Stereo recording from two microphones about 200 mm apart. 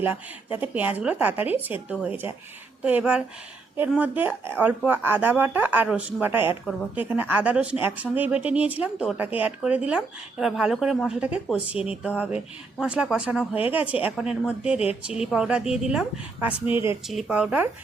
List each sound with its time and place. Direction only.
0.0 s a woman's voice: 10° right (ahead or behind)
16.5 s speech: 25° left (ahead or behind)
17.1 s a woman's voice: centre (ahead or behind)